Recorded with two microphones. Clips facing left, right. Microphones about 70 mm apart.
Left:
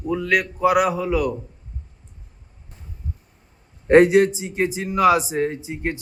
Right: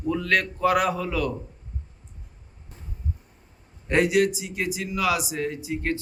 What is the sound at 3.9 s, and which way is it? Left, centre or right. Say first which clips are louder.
A man's voice: left 8 dB; left.